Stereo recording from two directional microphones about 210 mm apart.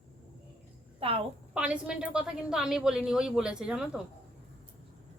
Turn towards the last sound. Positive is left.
turn(degrees=-5)  # may be behind; listen again after turning